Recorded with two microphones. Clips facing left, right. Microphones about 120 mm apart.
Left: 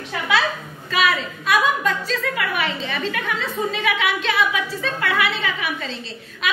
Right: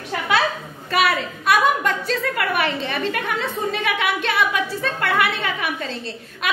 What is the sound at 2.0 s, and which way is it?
A woman's voice, 55° right (ahead or behind).